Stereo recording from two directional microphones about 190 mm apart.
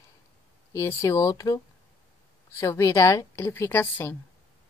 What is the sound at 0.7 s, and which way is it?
A woman's voice, 15° left (ahead or behind).